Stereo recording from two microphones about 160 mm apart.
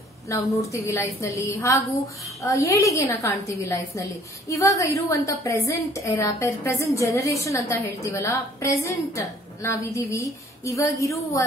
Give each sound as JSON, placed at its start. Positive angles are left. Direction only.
{"t": 0.3, "sound": "a woman's voice", "side_deg": 20}